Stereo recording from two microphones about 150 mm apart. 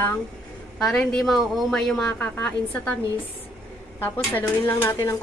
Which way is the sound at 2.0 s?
15° left (ahead or behind).